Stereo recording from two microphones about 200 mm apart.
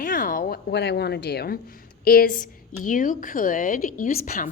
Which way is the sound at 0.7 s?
55° left (ahead or behind).